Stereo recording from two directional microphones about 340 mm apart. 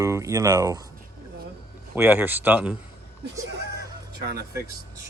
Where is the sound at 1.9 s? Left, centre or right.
Centre.